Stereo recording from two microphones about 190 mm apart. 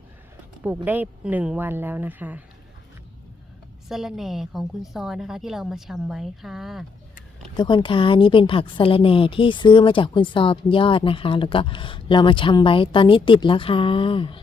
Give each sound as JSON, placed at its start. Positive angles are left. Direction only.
{"t": 0.9, "sound": "speech", "side_deg": -10}
{"t": 3.8, "sound": "a woman's voice", "side_deg": 0}
{"t": 7.5, "sound": "a woman's voice", "side_deg": 25}